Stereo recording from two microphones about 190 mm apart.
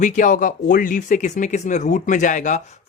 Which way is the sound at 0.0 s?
45° left (ahead or behind).